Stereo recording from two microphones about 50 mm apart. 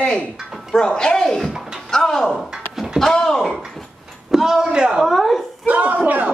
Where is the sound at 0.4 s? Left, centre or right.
Centre.